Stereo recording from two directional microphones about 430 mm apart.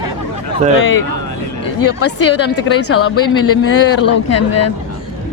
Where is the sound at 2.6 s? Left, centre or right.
Left.